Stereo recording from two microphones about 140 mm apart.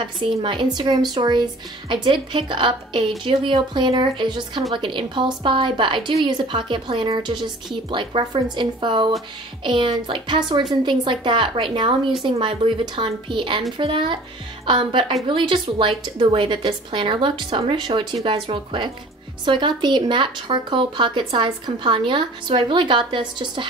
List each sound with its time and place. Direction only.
0.0 s speech: 35° right (ahead or behind)